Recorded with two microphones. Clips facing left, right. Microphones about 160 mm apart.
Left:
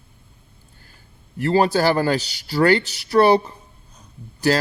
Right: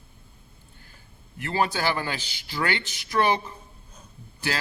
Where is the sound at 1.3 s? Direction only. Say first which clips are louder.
Left 9 dB; 35° left (ahead or behind).